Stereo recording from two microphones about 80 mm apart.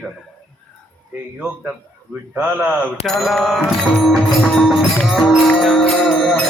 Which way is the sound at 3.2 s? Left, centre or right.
Centre.